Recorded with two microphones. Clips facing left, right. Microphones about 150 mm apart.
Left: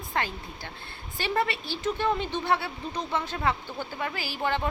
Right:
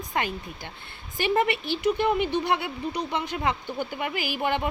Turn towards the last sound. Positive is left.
turn(degrees=-15)  # may be behind; listen again after turning